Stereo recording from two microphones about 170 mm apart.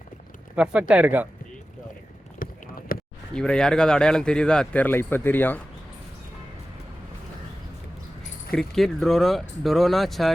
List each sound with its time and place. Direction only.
0.5 s speech: 5° right (ahead or behind)
2.4 s clip-clop: 55° left (ahead or behind)
2.9 s a sound: 60° left (ahead or behind)
3.3 s speech: 5° left (ahead or behind)
8.4 s speech: centre (ahead or behind)